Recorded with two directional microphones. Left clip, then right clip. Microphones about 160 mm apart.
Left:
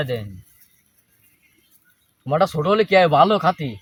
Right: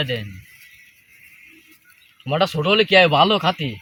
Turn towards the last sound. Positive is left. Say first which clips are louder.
# left 1 dB
turn(degrees=0)  # may be behind; listen again after turning